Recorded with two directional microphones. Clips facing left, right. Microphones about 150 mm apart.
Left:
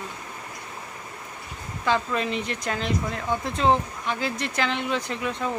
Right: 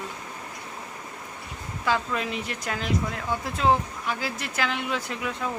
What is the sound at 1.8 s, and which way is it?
Speech, 5° right (ahead or behind).